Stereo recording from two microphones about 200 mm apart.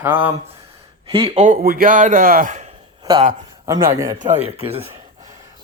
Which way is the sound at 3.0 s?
20° right (ahead or behind).